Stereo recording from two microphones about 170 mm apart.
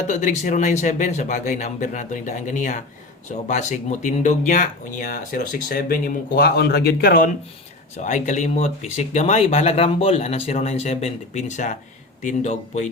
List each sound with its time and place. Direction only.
0.1 s speech: 45° left (ahead or behind); by 7.3 s 65° left (ahead or behind)
7.9 s speech: 45° left (ahead or behind)